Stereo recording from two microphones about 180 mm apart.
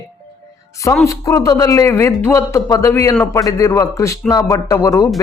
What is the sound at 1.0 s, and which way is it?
Speech, 15° left (ahead or behind).